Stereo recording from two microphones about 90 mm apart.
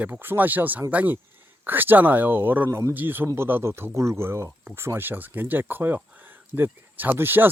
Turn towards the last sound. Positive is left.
turn(degrees=-25)  # may be behind; listen again after turning